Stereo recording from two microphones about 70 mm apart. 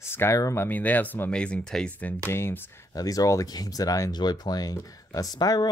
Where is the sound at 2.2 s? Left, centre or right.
Left.